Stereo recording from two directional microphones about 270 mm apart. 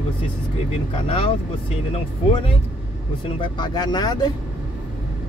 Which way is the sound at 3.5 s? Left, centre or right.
Centre.